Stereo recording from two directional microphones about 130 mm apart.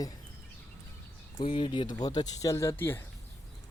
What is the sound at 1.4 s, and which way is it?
Speech, 40° left (ahead or behind).